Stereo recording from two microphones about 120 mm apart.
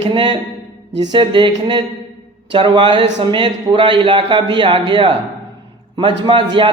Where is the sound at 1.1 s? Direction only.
40° right (ahead or behind).